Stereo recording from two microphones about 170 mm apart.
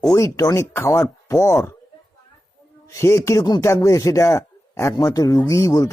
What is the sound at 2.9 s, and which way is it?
Speech, 15° left (ahead or behind).